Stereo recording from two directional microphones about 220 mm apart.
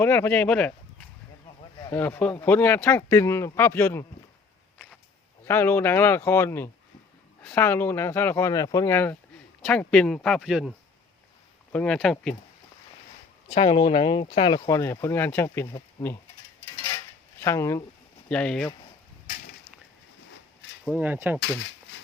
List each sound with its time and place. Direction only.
0.0 s speech: 10° left (ahead or behind)
1.8 s speech: 10° left (ahead or behind)
5.5 s speech: 10° left (ahead or behind)
13.5 s speech: 25° left (ahead or behind)
16.6 s a sound: 15° left (ahead or behind)
17.4 s speech: 10° left (ahead or behind)
20.8 s speech: 10° right (ahead or behind)
21.6 s a sound: 60° left (ahead or behind)